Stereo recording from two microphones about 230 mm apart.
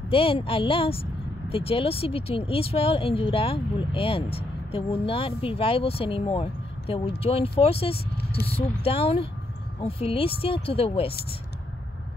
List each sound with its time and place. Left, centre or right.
0.1 s speech: left